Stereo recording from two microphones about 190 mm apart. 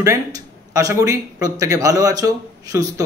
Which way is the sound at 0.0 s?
15° right (ahead or behind).